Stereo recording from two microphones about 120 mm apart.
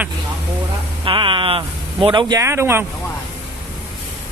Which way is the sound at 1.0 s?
45° right (ahead or behind).